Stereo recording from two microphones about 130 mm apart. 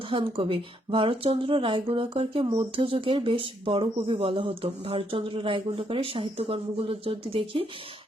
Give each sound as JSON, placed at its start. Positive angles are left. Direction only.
{"t": 0.1, "sound": "speech", "side_deg": -40}